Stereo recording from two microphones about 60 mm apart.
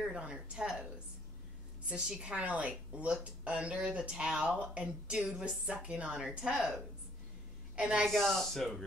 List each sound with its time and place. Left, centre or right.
0.0 s a woman's voice: centre
1.9 s a woman's voice: centre
7.7 s a woman's voice: centre
8.1 s speech: centre